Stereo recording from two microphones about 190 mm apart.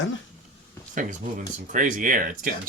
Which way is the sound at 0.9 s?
40° right (ahead or behind).